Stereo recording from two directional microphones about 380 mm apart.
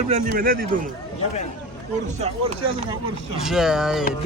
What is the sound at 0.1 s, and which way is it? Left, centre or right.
Speech, right.